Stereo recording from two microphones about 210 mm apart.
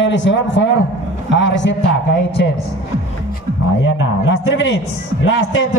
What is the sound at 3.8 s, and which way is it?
A woman's voice, 65° left (ahead or behind).